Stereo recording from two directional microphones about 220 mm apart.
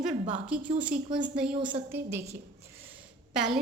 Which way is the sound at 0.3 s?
5° right (ahead or behind).